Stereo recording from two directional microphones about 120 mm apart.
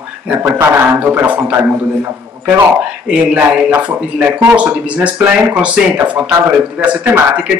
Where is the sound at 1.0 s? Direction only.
15° right (ahead or behind).